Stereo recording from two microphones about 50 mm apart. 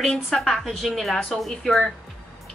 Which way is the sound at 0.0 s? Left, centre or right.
Centre.